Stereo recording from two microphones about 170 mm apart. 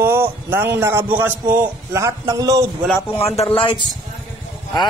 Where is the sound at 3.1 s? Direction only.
35° left (ahead or behind).